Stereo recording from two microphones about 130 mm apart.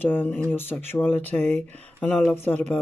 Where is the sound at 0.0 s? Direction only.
15° left (ahead or behind).